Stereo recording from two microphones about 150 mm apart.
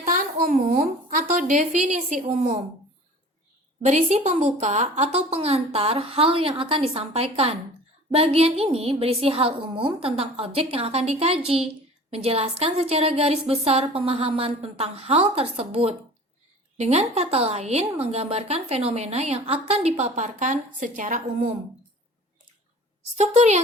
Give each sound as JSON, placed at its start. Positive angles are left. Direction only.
{"t": 0.0, "sound": "a sound", "side_deg": -65}
{"t": 1.1, "sound": "a woman's voice", "side_deg": -60}
{"t": 3.8, "sound": "a woman's voice", "side_deg": -50}
{"t": 23.1, "sound": "speech", "side_deg": -50}